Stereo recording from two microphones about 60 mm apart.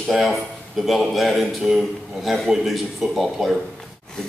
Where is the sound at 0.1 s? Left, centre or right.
Centre.